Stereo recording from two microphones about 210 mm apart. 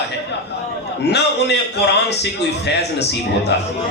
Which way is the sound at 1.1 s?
55° left (ahead or behind).